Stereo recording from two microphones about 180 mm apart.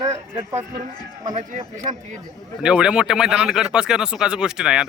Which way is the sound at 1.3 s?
45° right (ahead or behind).